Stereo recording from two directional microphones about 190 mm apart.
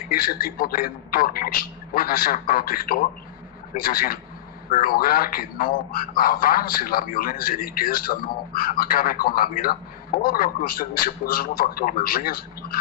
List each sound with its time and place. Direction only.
0.1 s speech: 50° left (ahead or behind)